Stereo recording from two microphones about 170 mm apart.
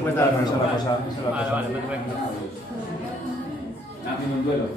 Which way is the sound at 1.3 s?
20° left (ahead or behind).